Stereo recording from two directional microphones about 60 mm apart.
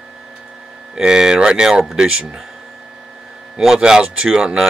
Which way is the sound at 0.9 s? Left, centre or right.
Centre.